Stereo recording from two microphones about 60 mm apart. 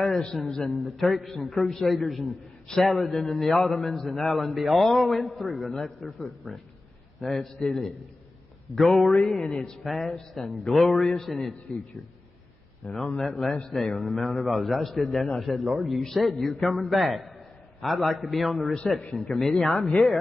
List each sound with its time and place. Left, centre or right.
0.0 s a man's voice: centre
0.8 s a man's voice: centre
7.2 s a man's voice: centre
7.6 s a man's voice: centre
8.7 s a man's voice: centre
18.8 s a man's voice: centre
19.4 s a man's voice: centre